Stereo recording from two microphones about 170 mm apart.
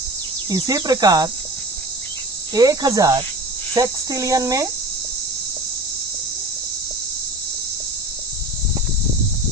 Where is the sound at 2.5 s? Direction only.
20° right (ahead or behind).